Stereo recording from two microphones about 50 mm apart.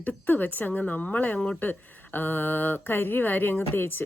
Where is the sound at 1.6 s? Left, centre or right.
Left.